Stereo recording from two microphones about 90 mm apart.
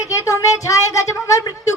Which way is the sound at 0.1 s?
35° left (ahead or behind).